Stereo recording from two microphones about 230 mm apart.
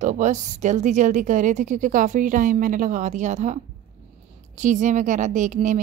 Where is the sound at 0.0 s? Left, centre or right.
Right.